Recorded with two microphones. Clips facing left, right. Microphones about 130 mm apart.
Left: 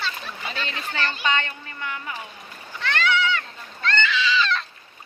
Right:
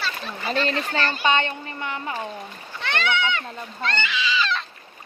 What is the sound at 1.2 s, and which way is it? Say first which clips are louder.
Speech: right 4 dB; 20° right (ahead or behind).